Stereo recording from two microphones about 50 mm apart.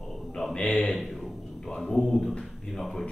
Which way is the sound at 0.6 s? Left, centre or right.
Left.